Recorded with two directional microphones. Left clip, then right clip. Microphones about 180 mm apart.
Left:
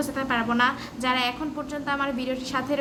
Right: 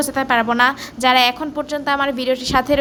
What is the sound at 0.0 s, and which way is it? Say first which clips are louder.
A woman's voice: right 9 dB; 40° right (ahead or behind).